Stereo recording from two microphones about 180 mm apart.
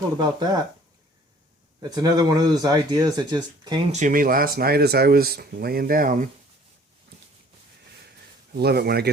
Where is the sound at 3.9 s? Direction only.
45° right (ahead or behind).